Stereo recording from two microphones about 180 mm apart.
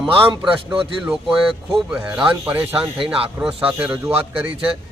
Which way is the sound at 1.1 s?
Centre (ahead or behind).